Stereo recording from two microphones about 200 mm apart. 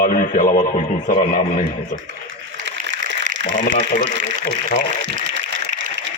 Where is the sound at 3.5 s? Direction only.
40° left (ahead or behind).